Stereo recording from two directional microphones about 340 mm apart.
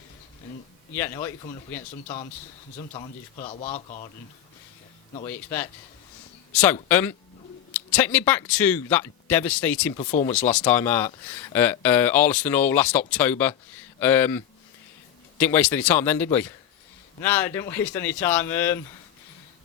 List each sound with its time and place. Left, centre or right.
0.9 s a man's voice: centre
2.7 s speech: centre
5.1 s speech: centre
10.0 s speech: left
10.2 s speech: centre